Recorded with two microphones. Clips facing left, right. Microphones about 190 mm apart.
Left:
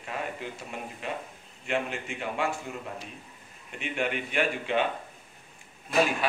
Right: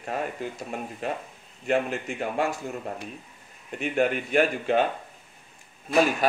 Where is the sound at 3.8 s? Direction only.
45° right (ahead or behind).